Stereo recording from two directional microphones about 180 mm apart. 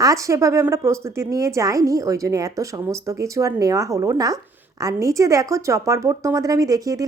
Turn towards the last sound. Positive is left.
turn(degrees=-20)  # may be behind; listen again after turning